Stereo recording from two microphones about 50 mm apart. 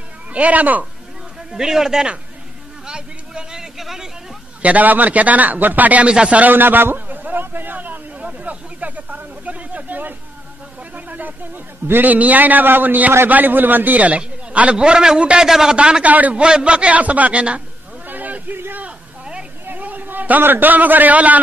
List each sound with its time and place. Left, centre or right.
0.3 s speech: right
1.5 s a man's voice: centre
2.9 s a sound: centre
4.6 s a man's voice: right
6.0 s a man's voice: right
6.4 s a sound: right
10.8 s a man's voice: right; by 15.7 s centre
15.7 s a man's voice: right
16.4 s a man's voice: centre
18.0 s a sound: right
18.9 s a sound: right
19.6 s a man's voice: right